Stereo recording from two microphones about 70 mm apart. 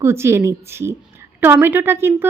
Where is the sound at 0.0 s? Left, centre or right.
Right.